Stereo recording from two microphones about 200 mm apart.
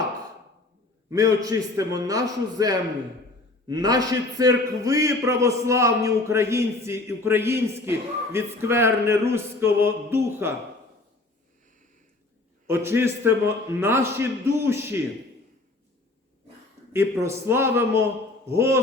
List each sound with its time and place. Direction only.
1.1 s a man's voice: 15° right (ahead or behind)
12.6 s a man's voice: 10° right (ahead or behind)
16.9 s a man's voice: 15° right (ahead or behind)